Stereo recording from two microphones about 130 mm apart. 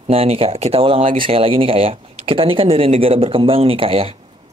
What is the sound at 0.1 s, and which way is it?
Speech, 50° right (ahead or behind).